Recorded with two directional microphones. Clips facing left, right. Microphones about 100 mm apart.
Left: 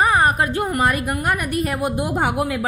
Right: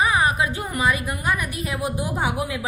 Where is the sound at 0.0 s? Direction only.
55° left (ahead or behind).